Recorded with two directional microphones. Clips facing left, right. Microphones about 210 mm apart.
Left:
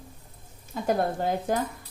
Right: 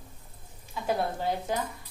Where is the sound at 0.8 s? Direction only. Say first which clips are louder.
Left 3 dB; 50° left (ahead or behind).